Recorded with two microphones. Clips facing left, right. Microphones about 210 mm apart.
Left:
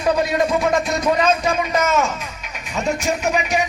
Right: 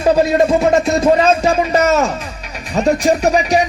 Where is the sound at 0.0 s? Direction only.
30° right (ahead or behind).